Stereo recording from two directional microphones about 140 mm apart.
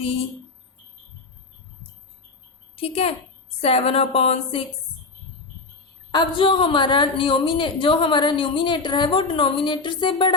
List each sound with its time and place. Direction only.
2.7 s a woman's voice: 45° left (ahead or behind)
6.1 s a woman's voice: 35° left (ahead or behind)